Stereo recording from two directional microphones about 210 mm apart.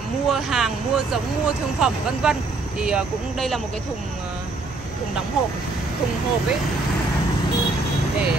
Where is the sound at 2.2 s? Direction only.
5° right (ahead or behind).